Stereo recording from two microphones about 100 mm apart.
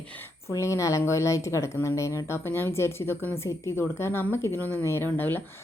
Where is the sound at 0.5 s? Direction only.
30° left (ahead or behind).